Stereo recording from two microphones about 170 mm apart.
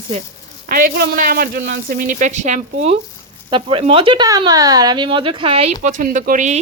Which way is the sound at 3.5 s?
30° right (ahead or behind).